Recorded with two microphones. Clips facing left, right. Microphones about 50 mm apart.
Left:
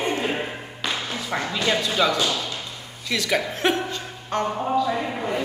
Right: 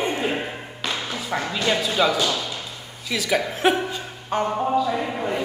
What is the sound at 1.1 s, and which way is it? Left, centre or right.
Music, centre.